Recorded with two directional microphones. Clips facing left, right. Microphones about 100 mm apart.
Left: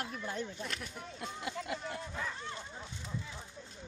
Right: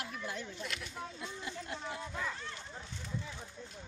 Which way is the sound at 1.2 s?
75° left (ahead or behind).